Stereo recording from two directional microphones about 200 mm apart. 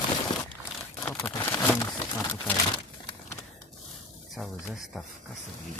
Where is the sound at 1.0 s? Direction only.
10° left (ahead or behind).